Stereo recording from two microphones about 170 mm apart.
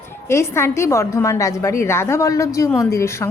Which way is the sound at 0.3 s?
15° left (ahead or behind).